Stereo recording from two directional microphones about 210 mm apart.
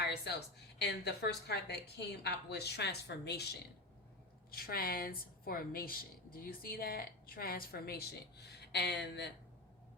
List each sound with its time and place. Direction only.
0.0 s a woman's voice: 50° left (ahead or behind)